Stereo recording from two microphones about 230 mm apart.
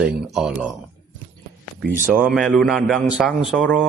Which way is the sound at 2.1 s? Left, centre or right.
Centre.